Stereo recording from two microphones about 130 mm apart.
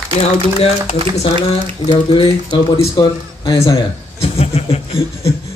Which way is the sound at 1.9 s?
45° left (ahead or behind).